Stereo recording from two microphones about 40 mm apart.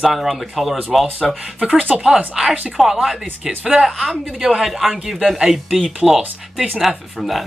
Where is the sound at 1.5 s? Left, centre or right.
Right.